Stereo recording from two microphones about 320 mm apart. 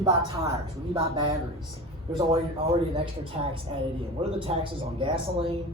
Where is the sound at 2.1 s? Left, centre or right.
Centre.